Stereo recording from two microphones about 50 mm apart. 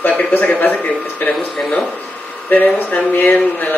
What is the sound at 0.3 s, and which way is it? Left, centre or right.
A man's voice, left.